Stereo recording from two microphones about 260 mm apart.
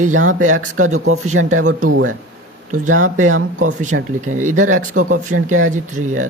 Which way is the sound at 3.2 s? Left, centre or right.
Right.